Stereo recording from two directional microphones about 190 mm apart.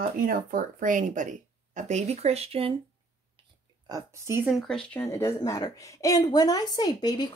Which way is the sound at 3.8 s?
20° right (ahead or behind).